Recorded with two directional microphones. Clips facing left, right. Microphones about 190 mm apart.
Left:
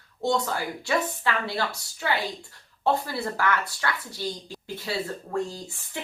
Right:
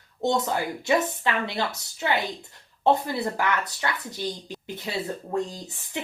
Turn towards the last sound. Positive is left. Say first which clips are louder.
# right 2 dB
turn(degrees=-20)  # may be behind; listen again after turning